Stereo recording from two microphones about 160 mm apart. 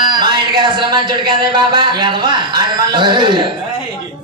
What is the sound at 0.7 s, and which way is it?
A man's voice, 30° right (ahead or behind).